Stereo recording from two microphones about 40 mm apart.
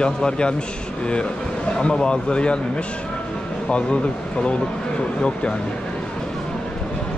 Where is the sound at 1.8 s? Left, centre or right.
Left.